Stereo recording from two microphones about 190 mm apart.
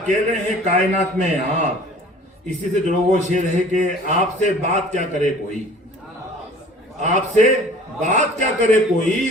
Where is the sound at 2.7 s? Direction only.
40° right (ahead or behind).